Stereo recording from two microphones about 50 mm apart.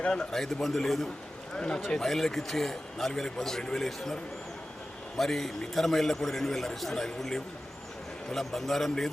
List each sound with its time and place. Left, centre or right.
0.0 s a man's voice: centre